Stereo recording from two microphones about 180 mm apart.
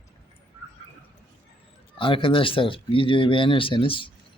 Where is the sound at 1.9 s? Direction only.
30° left (ahead or behind).